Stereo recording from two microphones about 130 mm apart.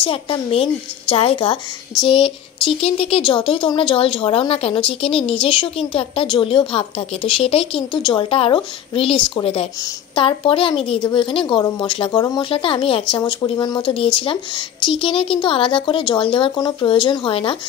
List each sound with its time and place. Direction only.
0.0 s a woman's voice: 45° left (ahead or behind)